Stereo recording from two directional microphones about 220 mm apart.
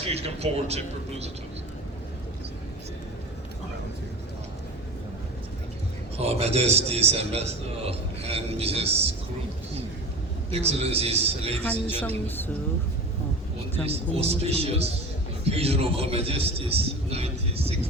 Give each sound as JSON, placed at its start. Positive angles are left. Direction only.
{"t": 0.1, "sound": "a man's voice", "side_deg": -30}
{"t": 6.1, "sound": "a man's voice", "side_deg": -30}
{"t": 10.5, "sound": "a man's voice", "side_deg": -25}
{"t": 11.6, "sound": "a woman's voice", "side_deg": 10}
{"t": 13.8, "sound": "a man's voice", "side_deg": -25}